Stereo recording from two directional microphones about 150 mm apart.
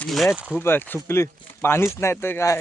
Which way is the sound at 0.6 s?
15° left (ahead or behind).